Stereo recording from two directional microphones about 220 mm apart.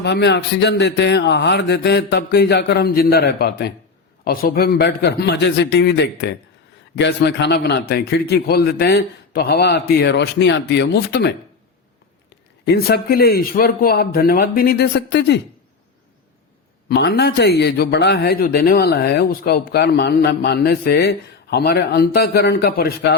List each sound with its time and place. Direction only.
0.0 s a man's voice: 50° left (ahead or behind)
12.6 s a man's voice: 45° left (ahead or behind)
16.9 s a man's voice: 45° left (ahead or behind)